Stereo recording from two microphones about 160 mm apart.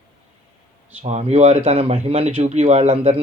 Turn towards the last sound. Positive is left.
turn(degrees=-40)  # may be behind; listen again after turning